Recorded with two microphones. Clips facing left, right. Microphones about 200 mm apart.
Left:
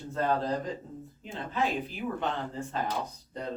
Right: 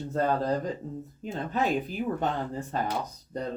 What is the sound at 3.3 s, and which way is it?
Speech, 45° right (ahead or behind).